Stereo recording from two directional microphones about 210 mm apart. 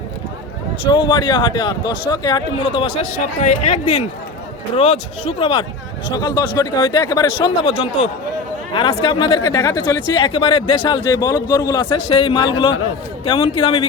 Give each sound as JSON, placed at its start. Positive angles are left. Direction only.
{"t": 0.9, "sound": "speech", "side_deg": 20}